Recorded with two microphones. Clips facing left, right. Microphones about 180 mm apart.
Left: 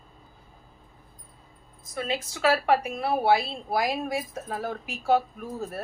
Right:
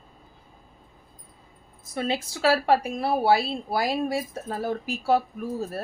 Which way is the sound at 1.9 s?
30° right (ahead or behind).